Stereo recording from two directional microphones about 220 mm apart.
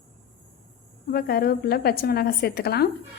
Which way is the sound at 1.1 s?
45° left (ahead or behind).